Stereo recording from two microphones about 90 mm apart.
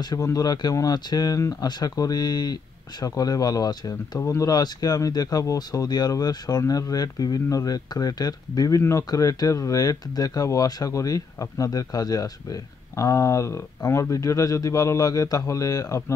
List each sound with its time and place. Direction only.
0.1 s speech: 45° left (ahead or behind)
4.2 s speech: 35° left (ahead or behind)